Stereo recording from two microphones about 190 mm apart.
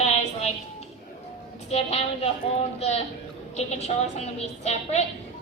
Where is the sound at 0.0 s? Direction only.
35° left (ahead or behind).